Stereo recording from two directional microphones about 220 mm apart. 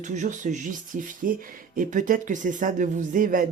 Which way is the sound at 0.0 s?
35° right (ahead or behind).